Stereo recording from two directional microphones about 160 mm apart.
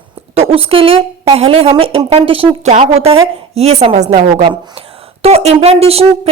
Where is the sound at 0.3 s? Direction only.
35° right (ahead or behind).